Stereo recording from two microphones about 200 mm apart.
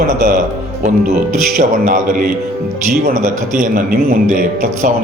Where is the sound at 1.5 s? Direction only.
40° right (ahead or behind).